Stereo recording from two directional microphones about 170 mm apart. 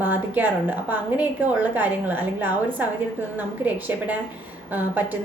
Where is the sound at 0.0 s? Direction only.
10° right (ahead or behind).